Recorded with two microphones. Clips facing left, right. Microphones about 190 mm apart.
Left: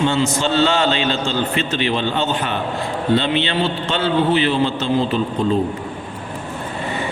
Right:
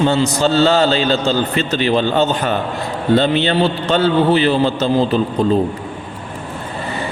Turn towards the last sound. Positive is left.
turn(degrees=-40)  # may be behind; listen again after turning